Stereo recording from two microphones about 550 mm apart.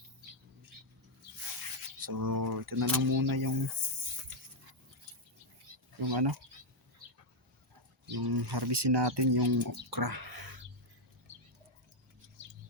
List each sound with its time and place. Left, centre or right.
2.0 s speech: right
6.0 s speech: right
8.1 s speech: right
9.9 s a sound: right